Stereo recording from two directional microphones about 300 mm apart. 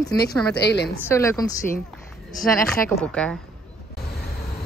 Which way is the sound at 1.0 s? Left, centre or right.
Centre.